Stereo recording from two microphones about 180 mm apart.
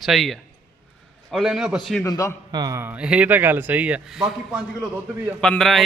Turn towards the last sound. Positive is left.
turn(degrees=5)  # may be behind; listen again after turning